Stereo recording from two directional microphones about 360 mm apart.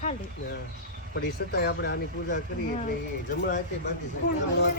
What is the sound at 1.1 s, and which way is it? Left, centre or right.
Speech, left.